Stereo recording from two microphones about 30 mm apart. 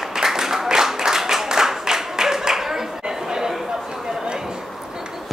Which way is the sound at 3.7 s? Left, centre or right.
Right.